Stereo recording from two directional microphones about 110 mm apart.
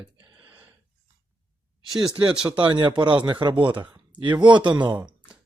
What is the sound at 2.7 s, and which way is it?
Speech, 45° right (ahead or behind).